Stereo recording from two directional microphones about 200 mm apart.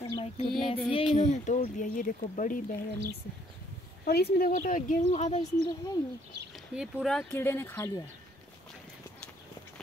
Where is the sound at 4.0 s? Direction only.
50° left (ahead or behind); by 5.4 s 35° left (ahead or behind).